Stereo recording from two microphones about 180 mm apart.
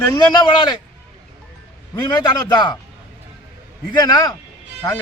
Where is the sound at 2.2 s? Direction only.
20° left (ahead or behind).